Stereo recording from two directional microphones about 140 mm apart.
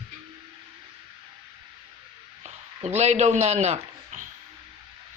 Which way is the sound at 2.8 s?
55° right (ahead or behind).